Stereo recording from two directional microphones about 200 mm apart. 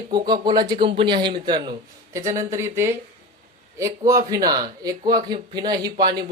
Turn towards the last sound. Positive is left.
turn(degrees=-20)  # may be behind; listen again after turning